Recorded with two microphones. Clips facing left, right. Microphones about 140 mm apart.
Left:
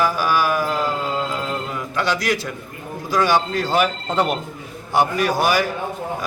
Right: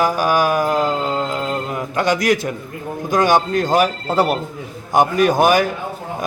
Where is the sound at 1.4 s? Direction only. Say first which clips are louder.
Right 4 dB; 45° right (ahead or behind).